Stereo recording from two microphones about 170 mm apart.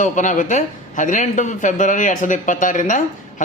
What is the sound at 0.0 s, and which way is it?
Speech, 45° left (ahead or behind).